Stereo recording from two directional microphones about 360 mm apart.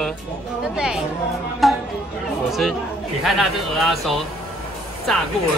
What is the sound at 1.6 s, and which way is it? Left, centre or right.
Music, centre.